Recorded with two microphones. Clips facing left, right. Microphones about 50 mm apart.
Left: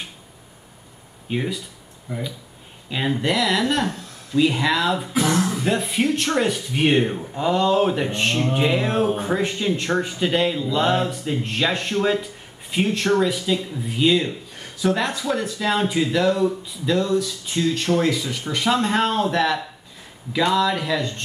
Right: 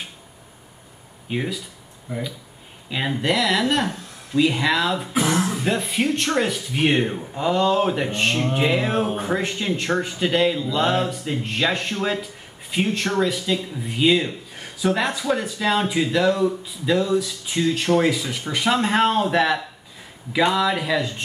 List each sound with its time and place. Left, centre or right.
1.3 s speech: centre
2.9 s speech: centre